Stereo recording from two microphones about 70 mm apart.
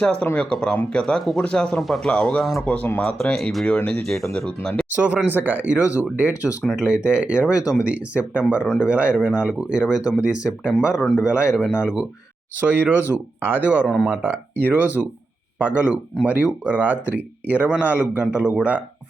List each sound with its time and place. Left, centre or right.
0.0 s speech: centre
2.4 s speech: centre
2.6 s speech: left
3.0 s speech: centre
4.9 s speech: right
12.5 s speech: right
13.9 s speech: centre
14.2 s speech: right